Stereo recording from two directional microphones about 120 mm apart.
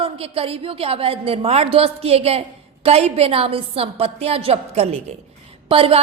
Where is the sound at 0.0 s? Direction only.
50° right (ahead or behind).